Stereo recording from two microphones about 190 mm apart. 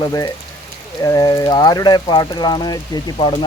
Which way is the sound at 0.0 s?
20° left (ahead or behind).